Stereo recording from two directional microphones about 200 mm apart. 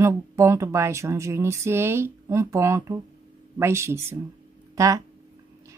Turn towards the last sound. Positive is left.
turn(degrees=-15)  # may be behind; listen again after turning